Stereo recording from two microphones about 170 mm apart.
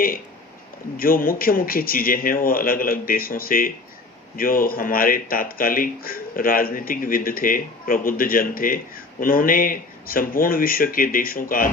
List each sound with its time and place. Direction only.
0.9 s speech: 60° left (ahead or behind)